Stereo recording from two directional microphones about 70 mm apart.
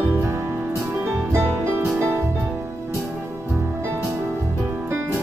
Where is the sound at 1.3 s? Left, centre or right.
Right.